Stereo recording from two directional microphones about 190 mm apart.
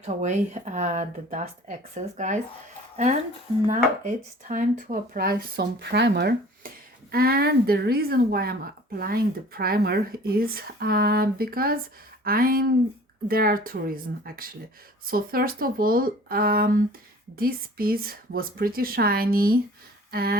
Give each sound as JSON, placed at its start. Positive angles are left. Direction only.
{"t": 0.0, "sound": "speech", "side_deg": -35}
{"t": 3.7, "sound": "a woman's voice", "side_deg": -45}
{"t": 20.1, "sound": "a sound", "side_deg": -55}